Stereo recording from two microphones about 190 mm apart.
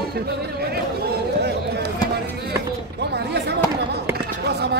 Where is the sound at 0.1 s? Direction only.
55° right (ahead or behind).